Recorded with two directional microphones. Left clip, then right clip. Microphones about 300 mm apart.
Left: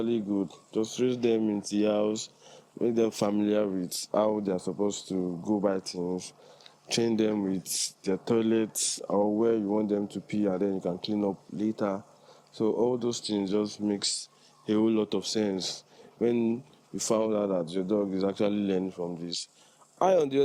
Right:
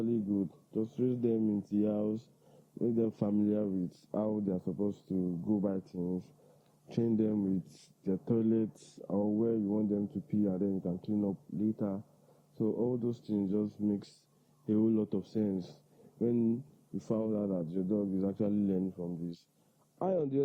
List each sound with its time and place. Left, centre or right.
0.3 s speech: centre
0.7 s speech: centre
4.9 s speech: centre
5.1 s speech: centre
12.5 s speech: left
13.0 s speech: centre
20.0 s speech: centre